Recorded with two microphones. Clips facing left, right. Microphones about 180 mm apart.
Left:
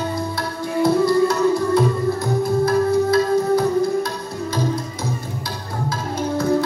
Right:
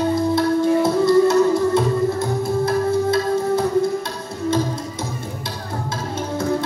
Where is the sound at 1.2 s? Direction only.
25° right (ahead or behind).